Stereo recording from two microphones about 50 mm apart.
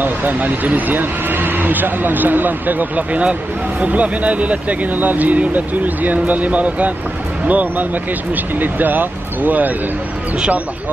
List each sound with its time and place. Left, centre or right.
0.0 s a man's voice: right